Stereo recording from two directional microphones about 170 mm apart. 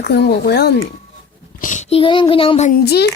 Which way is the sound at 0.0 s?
75° left (ahead or behind).